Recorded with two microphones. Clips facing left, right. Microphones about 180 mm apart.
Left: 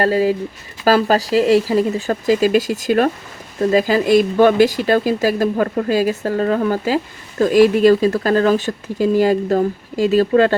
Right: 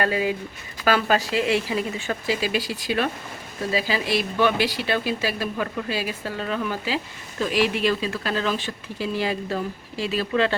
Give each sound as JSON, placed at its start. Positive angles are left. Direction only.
{"t": 0.0, "sound": "speech", "side_deg": 40}